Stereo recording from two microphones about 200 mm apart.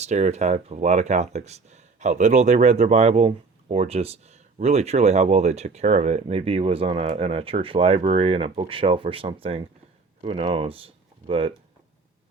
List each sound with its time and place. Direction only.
0.0 s speech: 35° right (ahead or behind)